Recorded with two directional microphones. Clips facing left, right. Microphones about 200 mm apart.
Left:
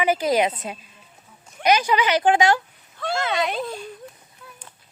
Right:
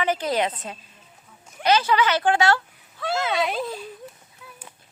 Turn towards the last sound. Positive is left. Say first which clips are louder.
# even
turn(degrees=0)  # may be behind; listen again after turning